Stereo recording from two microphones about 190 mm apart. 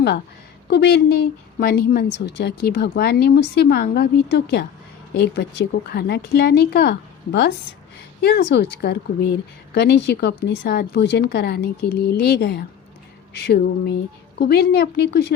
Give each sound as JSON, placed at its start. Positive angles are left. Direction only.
{"t": 0.7, "sound": "speech", "side_deg": 60}